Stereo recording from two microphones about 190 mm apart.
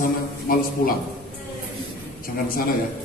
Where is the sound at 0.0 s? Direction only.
50° left (ahead or behind).